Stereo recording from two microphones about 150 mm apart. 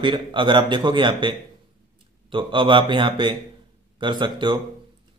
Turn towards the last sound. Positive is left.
turn(degrees=-30)  # may be behind; listen again after turning